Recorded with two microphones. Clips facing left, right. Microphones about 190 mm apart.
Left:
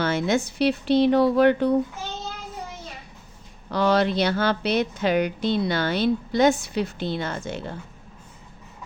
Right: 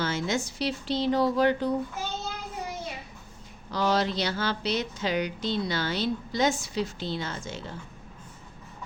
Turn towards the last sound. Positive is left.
turn(degrees=60)  # may be behind; listen again after turning